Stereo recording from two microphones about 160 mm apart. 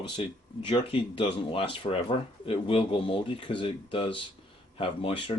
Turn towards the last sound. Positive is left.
turn(degrees=35)  # may be behind; listen again after turning